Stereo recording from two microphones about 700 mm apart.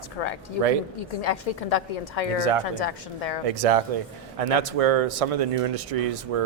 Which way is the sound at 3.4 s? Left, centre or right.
Right.